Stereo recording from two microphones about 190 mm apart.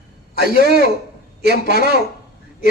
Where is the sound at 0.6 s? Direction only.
60° right (ahead or behind).